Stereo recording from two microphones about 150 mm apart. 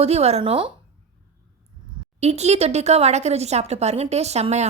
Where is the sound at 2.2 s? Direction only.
45° right (ahead or behind).